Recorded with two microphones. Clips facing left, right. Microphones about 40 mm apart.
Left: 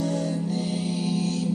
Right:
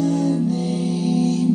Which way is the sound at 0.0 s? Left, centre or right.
Centre.